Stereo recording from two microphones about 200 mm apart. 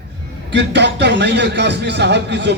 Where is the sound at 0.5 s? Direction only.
60° right (ahead or behind).